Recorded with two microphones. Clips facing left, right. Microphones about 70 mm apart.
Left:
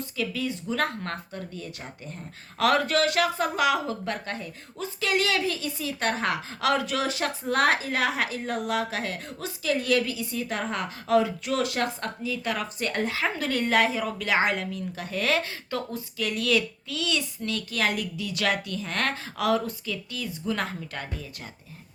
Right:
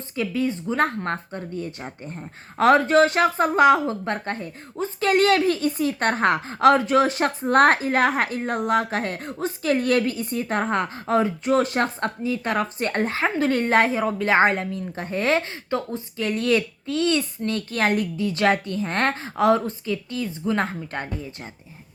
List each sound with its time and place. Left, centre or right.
0.2 s speech: right